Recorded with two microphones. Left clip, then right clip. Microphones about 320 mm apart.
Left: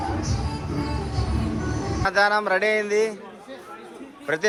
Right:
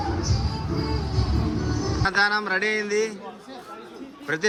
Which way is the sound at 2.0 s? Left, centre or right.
Centre.